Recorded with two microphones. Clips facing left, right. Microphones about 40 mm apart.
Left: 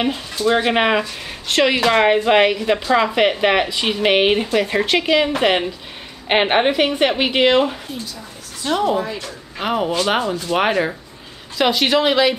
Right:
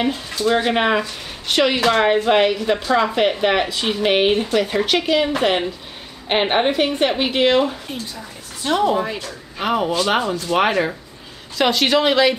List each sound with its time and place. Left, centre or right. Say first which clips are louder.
0.5 s a woman's voice: left 1 dB; centre
3.5 s a woman's voice: left 1 dB; centre
4.1 s a woman's voice: left 1 dB; left
8.6 s speech: right 1 dB; centre